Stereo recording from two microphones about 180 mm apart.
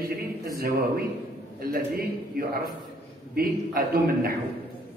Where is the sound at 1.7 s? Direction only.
55° right (ahead or behind).